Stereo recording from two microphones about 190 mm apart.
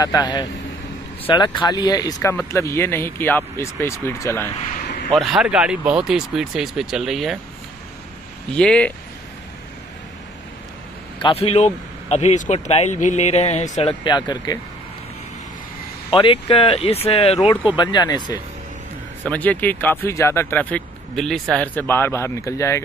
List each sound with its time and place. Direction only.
0.0 s speech: 20° left (ahead or behind)
5.1 s speech: centre (ahead or behind)
8.5 s speech: 5° left (ahead or behind)
11.1 s speech: 30° left (ahead or behind)
16.1 s speech: 25° left (ahead or behind)
19.2 s speech: 10° left (ahead or behind)